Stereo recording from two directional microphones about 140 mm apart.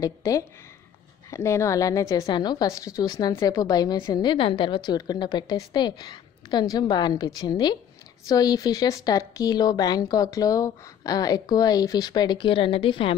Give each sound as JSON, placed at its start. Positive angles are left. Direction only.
{"t": 0.0, "sound": "a woman's voice", "side_deg": 25}